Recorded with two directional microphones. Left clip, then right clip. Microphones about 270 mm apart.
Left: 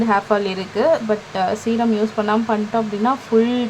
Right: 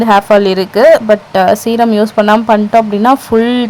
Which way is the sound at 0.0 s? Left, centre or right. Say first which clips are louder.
Right 10 dB; right.